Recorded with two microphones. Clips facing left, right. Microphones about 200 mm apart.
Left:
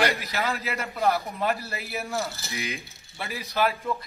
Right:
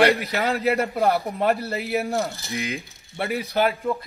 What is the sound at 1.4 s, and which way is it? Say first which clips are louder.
Speech: right 6 dB; 65° right (ahead or behind).